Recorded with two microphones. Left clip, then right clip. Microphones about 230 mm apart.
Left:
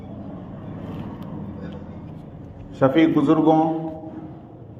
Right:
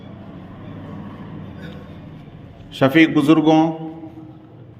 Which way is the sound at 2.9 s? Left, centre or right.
Right.